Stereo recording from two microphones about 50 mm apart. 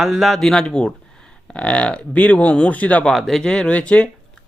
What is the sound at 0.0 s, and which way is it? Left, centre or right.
Speech, centre.